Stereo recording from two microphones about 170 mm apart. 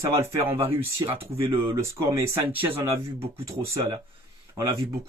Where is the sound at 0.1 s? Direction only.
15° right (ahead or behind).